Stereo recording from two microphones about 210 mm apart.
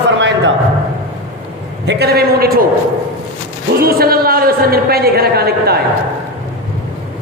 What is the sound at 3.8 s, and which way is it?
A woman's voice, 45° right (ahead or behind).